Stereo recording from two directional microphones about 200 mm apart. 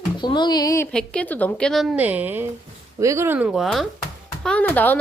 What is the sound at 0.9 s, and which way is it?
A woman's voice, 5° left (ahead or behind).